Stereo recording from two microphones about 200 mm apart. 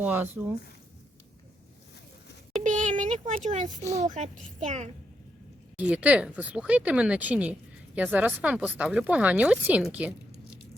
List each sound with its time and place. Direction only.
0.0 s speech: 10° right (ahead or behind)
2.6 s a child's voice: 35° right (ahead or behind)
5.7 s speech: 5° right (ahead or behind)